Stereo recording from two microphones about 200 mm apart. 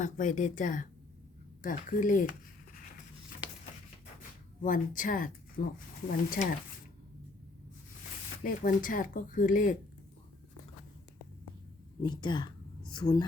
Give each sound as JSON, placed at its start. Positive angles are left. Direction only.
{"t": 0.0, "sound": "a woman's voice", "side_deg": 40}
{"t": 4.6, "sound": "speech", "side_deg": 40}
{"t": 8.4, "sound": "speech", "side_deg": 45}
{"t": 12.0, "sound": "a woman's voice", "side_deg": 25}